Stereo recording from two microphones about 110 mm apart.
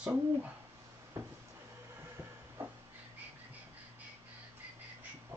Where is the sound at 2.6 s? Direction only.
20° right (ahead or behind).